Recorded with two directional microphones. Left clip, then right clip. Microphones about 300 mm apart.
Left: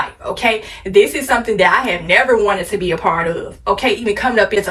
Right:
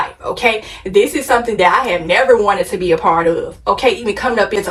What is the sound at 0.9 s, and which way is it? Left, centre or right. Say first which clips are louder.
A woman's voice: even; centre.